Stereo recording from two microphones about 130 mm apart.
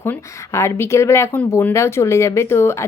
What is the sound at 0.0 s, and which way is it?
Speech, 20° left (ahead or behind).